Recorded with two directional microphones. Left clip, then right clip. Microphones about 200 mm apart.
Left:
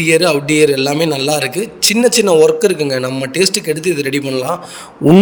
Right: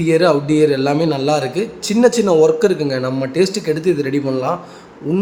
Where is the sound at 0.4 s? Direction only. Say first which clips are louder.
Left 2 dB; 45° left (ahead or behind).